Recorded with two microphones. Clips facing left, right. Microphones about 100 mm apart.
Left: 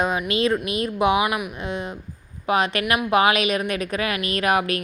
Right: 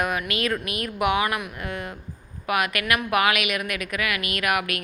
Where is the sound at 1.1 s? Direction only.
15° left (ahead or behind).